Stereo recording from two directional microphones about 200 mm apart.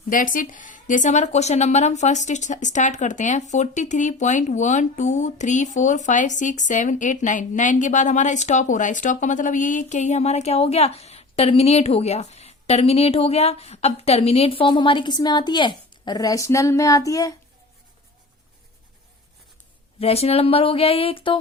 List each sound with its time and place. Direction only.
0.1 s a woman's voice: 40° left (ahead or behind); by 17.3 s 15° left (ahead or behind)
20.0 s speech: 30° left (ahead or behind)